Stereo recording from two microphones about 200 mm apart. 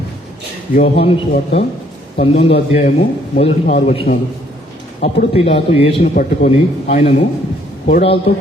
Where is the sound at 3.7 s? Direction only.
30° left (ahead or behind).